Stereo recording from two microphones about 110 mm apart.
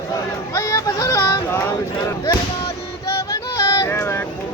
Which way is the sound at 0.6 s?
30° left (ahead or behind).